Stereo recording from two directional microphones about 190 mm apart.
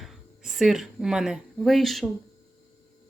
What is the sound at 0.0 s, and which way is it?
Speech, centre (ahead or behind).